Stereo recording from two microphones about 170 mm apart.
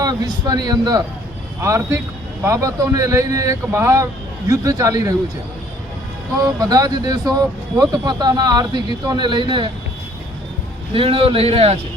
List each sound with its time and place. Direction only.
0.0 s a man's voice: 20° right (ahead or behind)
6.4 s speech: 20° right (ahead or behind)
10.9 s a man's voice: 35° right (ahead or behind)